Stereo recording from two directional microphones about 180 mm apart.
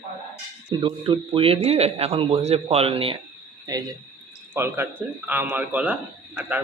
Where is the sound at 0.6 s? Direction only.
25° right (ahead or behind).